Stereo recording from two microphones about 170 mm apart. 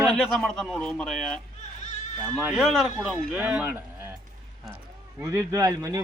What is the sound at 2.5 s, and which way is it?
Speech, centre (ahead or behind).